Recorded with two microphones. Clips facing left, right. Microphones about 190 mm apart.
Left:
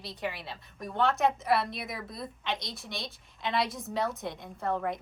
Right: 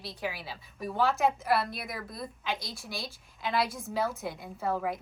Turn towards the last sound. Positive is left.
turn(degrees=-5)  # may be behind; listen again after turning